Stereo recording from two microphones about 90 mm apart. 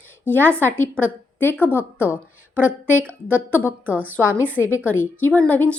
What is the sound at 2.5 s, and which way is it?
Speech, 20° right (ahead or behind).